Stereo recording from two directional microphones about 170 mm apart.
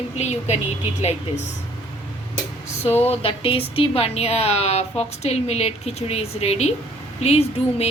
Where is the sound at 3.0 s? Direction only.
35° left (ahead or behind).